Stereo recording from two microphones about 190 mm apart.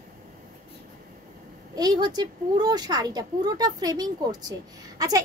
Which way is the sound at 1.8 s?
20° right (ahead or behind).